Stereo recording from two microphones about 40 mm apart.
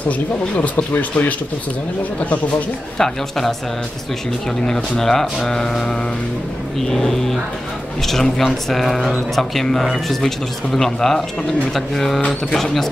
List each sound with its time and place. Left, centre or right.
0.9 s speech: left
3.0 s speech: centre
4.6 s speech: centre